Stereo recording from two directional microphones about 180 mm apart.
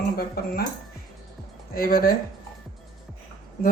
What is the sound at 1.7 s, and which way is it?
Speech, 50° left (ahead or behind).